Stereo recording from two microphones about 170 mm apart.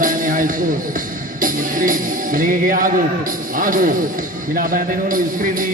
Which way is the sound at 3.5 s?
55° right (ahead or behind).